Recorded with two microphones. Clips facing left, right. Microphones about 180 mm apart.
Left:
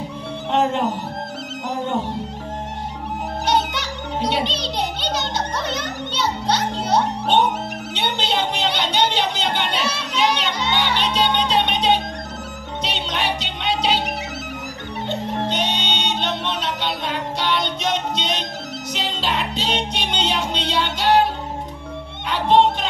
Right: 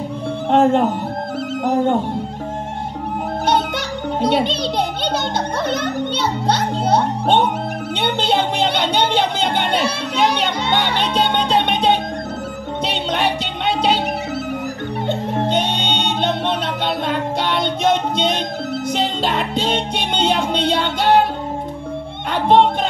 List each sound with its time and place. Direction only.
0.5 s speech: 50° right (ahead or behind)
1.6 s music: 55° right (ahead or behind)
3.4 s music: 55° right (ahead or behind)
15.0 s music: 55° right (ahead or behind)
22.3 s music: 55° right (ahead or behind)